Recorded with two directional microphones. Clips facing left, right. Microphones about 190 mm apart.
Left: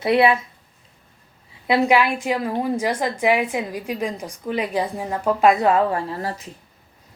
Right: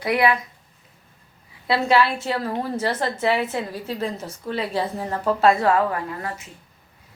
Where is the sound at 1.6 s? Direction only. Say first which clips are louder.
Left 2 dB; 15° left (ahead or behind); by 6.5 s 35° left (ahead or behind).